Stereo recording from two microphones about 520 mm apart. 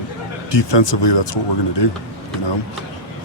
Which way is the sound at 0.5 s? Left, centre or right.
Left.